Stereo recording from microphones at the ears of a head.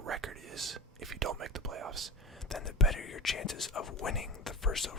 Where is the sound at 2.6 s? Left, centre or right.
Left.